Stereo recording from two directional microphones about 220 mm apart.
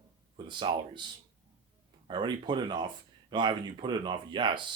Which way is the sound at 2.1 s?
20° right (ahead or behind).